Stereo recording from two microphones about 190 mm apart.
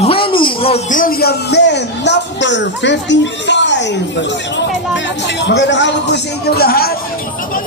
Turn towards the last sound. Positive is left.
turn(degrees=55)  # may be behind; listen again after turning